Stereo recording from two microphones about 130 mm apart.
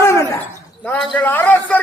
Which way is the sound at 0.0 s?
20° left (ahead or behind).